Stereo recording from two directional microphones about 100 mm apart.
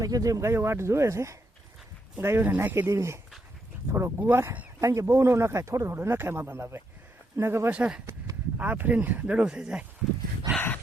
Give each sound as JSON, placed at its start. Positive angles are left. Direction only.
{"t": 0.0, "sound": "speech", "side_deg": -35}
{"t": 7.7, "sound": "speech", "side_deg": -10}
{"t": 10.5, "sound": "dog", "side_deg": 20}